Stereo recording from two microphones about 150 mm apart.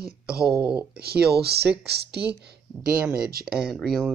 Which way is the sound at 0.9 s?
90° right.